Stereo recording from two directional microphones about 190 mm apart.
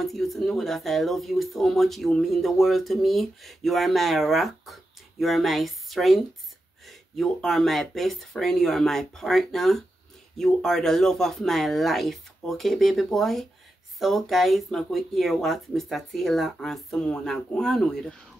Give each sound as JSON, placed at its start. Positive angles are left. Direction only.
{"t": 0.0, "sound": "speech", "side_deg": 0}